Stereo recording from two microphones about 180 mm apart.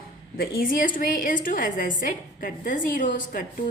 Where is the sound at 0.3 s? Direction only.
50° left (ahead or behind).